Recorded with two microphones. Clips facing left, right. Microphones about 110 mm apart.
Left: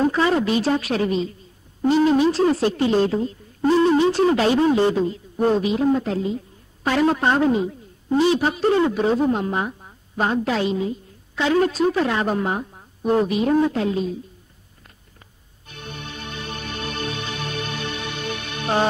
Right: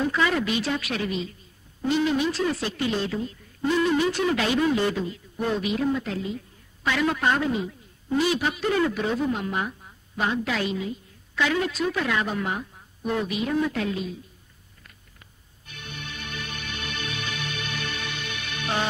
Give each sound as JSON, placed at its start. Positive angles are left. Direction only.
{"t": 0.0, "sound": "a woman's voice", "side_deg": 35}
{"t": 15.6, "sound": "music", "side_deg": 35}